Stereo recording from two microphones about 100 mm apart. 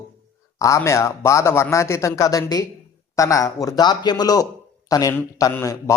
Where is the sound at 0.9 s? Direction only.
30° left (ahead or behind).